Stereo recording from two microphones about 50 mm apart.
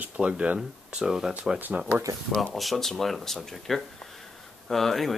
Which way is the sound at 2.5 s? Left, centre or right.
Centre.